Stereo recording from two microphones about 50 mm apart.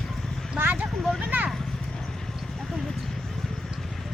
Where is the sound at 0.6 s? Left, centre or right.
Right.